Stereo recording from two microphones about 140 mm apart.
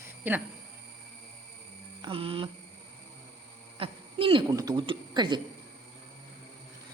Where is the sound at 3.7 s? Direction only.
40° right (ahead or behind).